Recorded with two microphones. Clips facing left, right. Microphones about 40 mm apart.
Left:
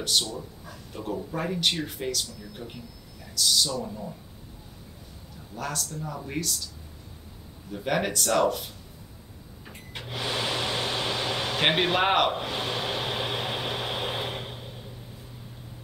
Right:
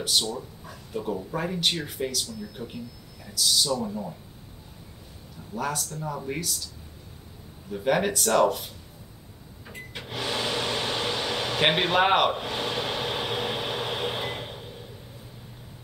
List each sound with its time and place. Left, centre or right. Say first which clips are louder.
0.9 s speech: right 2 dB; centre
3.7 s speech: right 4 dB; centre
5.6 s speech: right 3 dB; centre
7.7 s speech: right 3 dB; centre
9.9 s speech: even; centre
10.6 s air conditioning: right 1 dB; centre
12.4 s a sound: right 1 dB; centre